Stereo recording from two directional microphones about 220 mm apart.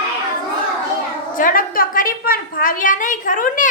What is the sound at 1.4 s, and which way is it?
A woman's voice, 40° left (ahead or behind).